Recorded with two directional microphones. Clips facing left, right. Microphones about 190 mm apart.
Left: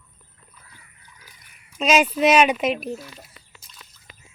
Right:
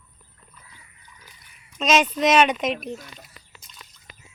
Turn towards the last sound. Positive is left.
turn(degrees=0)  # may be behind; listen again after turning